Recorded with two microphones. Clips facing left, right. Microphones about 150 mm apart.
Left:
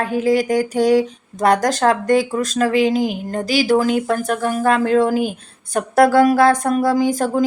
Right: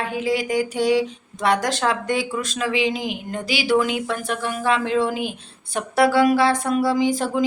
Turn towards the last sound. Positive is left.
turn(degrees=45)  # may be behind; listen again after turning